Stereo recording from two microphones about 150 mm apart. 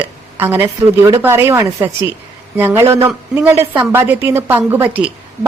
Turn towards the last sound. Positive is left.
turn(degrees=-10)  # may be behind; listen again after turning